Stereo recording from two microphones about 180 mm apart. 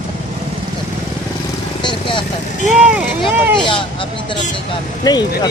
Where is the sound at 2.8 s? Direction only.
5° right (ahead or behind).